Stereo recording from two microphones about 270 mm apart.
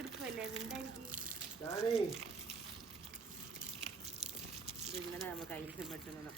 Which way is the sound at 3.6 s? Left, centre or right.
Right.